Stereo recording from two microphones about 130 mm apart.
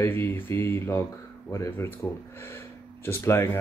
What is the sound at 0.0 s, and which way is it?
Speech, 20° left (ahead or behind).